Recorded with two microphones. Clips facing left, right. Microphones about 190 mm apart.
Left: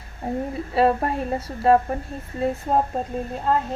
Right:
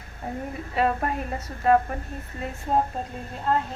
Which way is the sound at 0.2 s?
30° left (ahead or behind).